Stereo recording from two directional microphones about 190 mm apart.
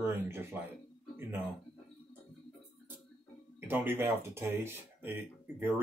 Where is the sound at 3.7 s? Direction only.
10° right (ahead or behind).